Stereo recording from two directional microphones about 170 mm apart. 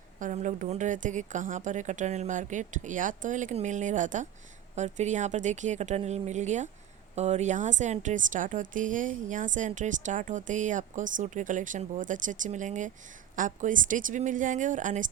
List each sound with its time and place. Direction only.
0.2 s a woman's voice: 50° right (ahead or behind)